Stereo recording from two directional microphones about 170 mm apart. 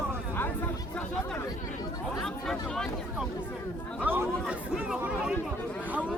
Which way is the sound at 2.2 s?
5° left (ahead or behind).